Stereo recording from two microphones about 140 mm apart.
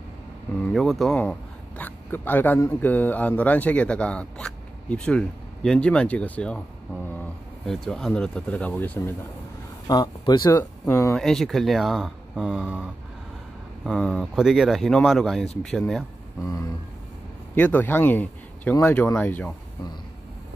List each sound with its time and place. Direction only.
0.6 s speech: centre (ahead or behind)
7.6 s speech: 5° left (ahead or behind)
9.8 s speech: 30° left (ahead or behind)
10.6 s speech: 20° left (ahead or behind)
11.1 s speech: centre (ahead or behind)
13.8 s speech: 5° left (ahead or behind)
16.4 s speech: 25° left (ahead or behind)
17.6 s speech: 15° left (ahead or behind)